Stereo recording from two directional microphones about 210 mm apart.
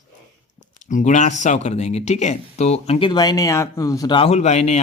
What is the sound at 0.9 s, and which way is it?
Speech, 35° left (ahead or behind).